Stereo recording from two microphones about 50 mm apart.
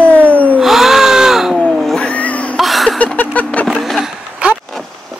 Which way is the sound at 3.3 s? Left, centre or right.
Left.